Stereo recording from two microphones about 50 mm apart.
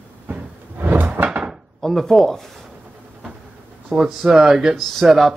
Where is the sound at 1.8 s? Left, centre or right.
Centre.